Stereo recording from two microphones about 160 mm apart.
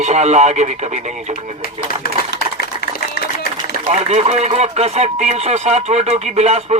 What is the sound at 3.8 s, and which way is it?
Speech, 40° right (ahead or behind).